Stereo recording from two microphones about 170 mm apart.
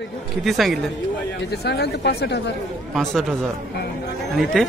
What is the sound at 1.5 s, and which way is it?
Speech, 75° left (ahead or behind).